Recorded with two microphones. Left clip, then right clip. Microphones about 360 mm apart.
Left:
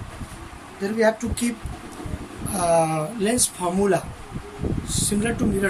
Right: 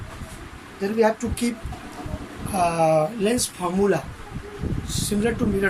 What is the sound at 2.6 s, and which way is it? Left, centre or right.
Speech, centre.